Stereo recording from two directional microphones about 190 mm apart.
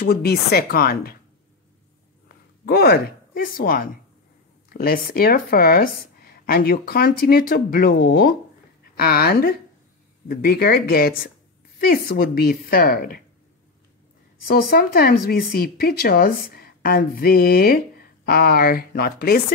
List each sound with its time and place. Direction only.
0.0 s speech: 55° left (ahead or behind)
2.2 s speech: 55° left (ahead or behind)
14.5 s speech: 50° left (ahead or behind)